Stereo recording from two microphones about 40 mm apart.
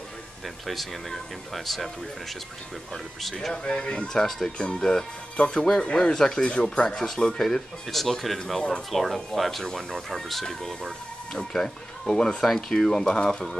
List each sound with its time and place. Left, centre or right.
0.7 s speech: centre
3.5 s speech: left
4.1 s speech: centre